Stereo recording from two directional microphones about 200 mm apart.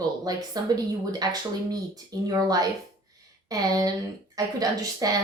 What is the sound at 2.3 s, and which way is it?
A woman's voice, 20° right (ahead or behind).